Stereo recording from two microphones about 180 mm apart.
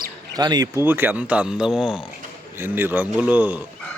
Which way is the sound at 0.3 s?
20° right (ahead or behind).